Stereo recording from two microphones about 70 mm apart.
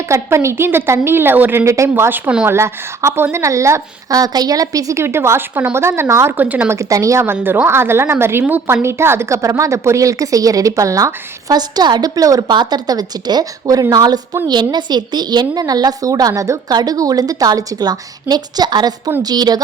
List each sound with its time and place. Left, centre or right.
0.1 s a woman's voice: right
1.6 s a woman's voice: right
2.0 s speech: right
2.5 s a woman's voice: right
5.0 s a woman's voice: right
6.3 s speech: right
6.7 s a woman's voice: right
7.4 s a woman's voice: right
11.5 s a woman's voice: right
13.9 s a woman's voice: right
14.4 s a woman's voice: right
16.7 s a woman's voice: right